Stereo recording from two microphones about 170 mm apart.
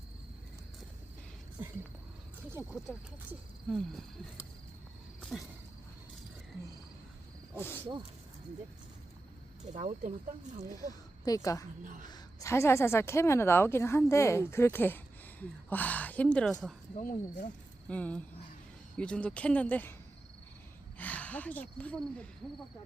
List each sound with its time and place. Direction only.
2.6 s speech: 10° right (ahead or behind)
3.7 s cricket: centre (ahead or behind)
5.3 s cricket: 5° left (ahead or behind)
9.7 s speech: 40° right (ahead or behind)
11.3 s a woman's voice: 20° left (ahead or behind)
11.8 s a woman's voice: 50° right (ahead or behind)
12.0 s a woman's voice: 20° left (ahead or behind); by 16.7 s 5° left (ahead or behind)
17.0 s speech: 55° left (ahead or behind)
17.8 s speech: 5° left (ahead or behind)
21.0 s speech: 10° left (ahead or behind)